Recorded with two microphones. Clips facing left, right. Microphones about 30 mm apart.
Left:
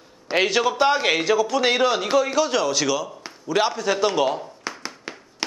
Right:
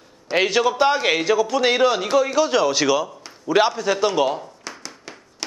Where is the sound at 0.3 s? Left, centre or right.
Centre.